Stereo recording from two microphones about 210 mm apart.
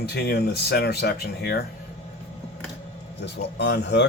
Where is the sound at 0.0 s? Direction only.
50° left (ahead or behind).